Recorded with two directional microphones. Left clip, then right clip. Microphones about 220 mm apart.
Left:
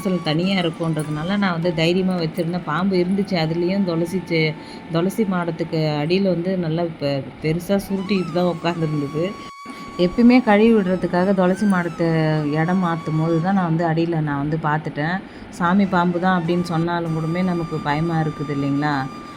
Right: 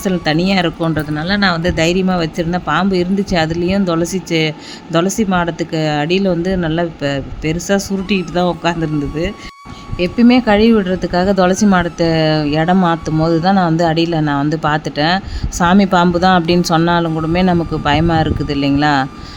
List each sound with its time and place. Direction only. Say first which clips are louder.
0.0 s speech: right 6 dB; 25° right (ahead or behind)
10.0 s speech: right 3 dB; 20° right (ahead or behind)